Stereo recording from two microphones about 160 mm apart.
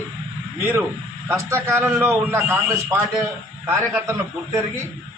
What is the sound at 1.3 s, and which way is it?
A man's voice, 15° right (ahead or behind).